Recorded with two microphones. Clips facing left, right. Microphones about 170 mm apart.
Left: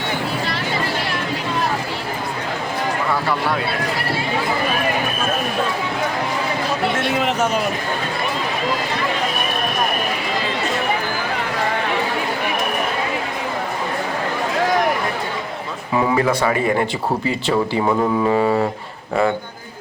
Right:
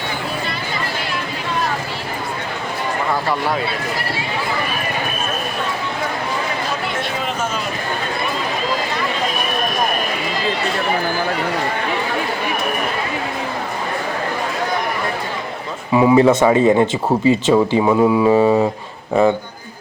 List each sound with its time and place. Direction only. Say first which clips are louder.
7.2 s a sound: left 4 dB; 75° left (ahead or behind)
16.0 s mantra: right 6 dB; 15° right (ahead or behind)
16.2 s speech: right 6 dB; 25° right (ahead or behind)
17.8 s mantra: right 4 dB; 10° right (ahead or behind)